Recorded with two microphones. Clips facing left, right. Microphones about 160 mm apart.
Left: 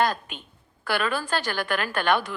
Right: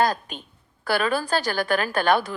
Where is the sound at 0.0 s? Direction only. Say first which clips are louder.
Right 2 dB; 35° right (ahead or behind).